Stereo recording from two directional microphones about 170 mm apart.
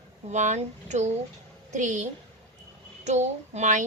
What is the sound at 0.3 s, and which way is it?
A woman's voice, 45° right (ahead or behind).